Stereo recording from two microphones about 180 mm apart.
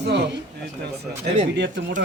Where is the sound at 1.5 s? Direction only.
80° right.